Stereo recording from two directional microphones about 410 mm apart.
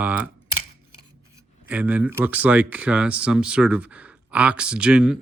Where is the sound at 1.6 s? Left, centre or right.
Centre.